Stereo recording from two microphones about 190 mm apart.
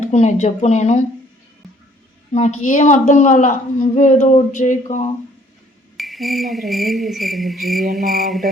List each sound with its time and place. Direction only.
0.0 s a woman's voice: 40° left (ahead or behind)
2.3 s a woman's voice: 40° left (ahead or behind)
6.0 s cricket: centre (ahead or behind)